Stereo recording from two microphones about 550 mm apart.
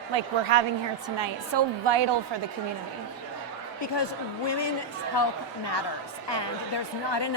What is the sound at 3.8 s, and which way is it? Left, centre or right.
Speech, left.